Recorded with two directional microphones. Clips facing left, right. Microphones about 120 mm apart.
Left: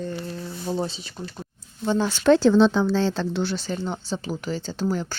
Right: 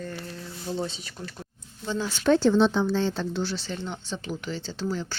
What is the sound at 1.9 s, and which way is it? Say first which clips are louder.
Speech: left 5 dB; 65° left (ahead or behind).